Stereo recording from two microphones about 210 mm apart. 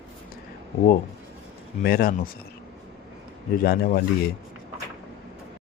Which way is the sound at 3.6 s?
50° left (ahead or behind).